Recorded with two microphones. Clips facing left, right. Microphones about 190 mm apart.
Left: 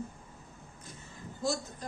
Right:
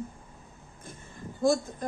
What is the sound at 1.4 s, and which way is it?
Speech, 50° right (ahead or behind).